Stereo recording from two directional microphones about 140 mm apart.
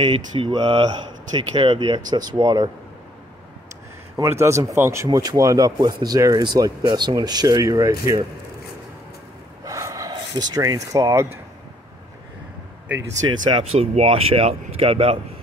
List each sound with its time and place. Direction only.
0.0 s speech: 35° right (ahead or behind)
4.2 s speech: 20° right (ahead or behind)
9.7 s a sound: 20° right (ahead or behind)
13.3 s speech: 35° right (ahead or behind)